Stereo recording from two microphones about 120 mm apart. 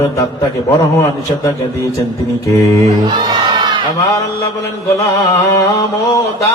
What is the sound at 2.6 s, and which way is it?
Mantra, 25° left (ahead or behind).